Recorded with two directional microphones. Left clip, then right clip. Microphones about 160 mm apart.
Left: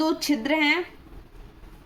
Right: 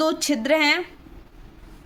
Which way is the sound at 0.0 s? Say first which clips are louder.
Right 2 dB; 45° right (ahead or behind).